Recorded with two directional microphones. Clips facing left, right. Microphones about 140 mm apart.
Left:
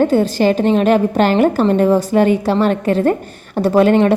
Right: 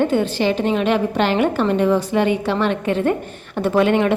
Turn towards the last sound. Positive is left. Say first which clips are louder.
# left 5 dB
turn(degrees=40)  # may be behind; listen again after turning